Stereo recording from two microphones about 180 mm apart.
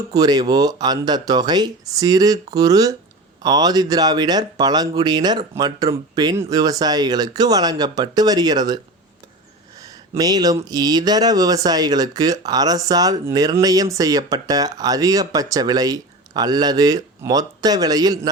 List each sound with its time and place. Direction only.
0.1 s speech: 20° right (ahead or behind)
9.8 s speech: 20° right (ahead or behind)